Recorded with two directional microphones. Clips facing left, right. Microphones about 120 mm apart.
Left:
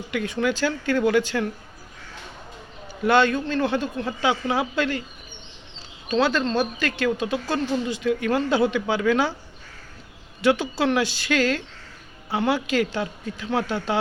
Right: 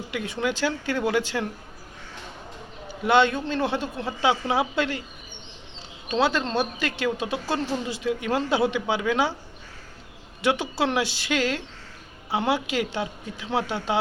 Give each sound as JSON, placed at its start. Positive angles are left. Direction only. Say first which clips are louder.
{"t": 0.1, "sound": "speech", "louder": "left 4 dB", "side_deg": -20}
{"t": 3.0, "sound": "speech", "louder": "left 1 dB", "side_deg": -20}
{"t": 6.1, "sound": "speech", "louder": "left 2 dB", "side_deg": -25}
{"t": 10.4, "sound": "speech", "louder": "left 3 dB", "side_deg": -25}